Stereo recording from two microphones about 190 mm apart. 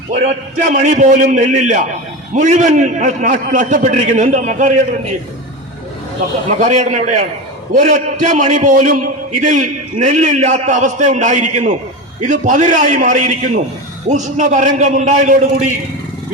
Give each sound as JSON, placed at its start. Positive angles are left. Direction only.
{"t": 0.1, "sound": "a man's voice", "side_deg": -40}
{"t": 6.6, "sound": "a man's voice", "side_deg": -40}